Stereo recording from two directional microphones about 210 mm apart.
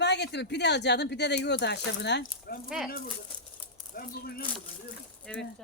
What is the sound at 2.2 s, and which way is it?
Speech, 45° left (ahead or behind).